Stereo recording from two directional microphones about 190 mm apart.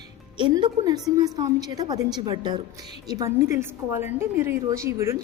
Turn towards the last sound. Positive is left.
turn(degrees=-15)  # may be behind; listen again after turning